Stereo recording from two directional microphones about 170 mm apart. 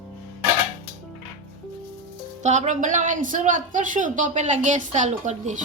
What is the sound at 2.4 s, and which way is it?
A woman's voice, 45° right (ahead or behind).